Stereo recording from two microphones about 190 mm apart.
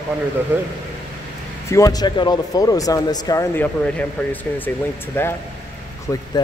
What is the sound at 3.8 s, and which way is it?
Speech, 5° left (ahead or behind).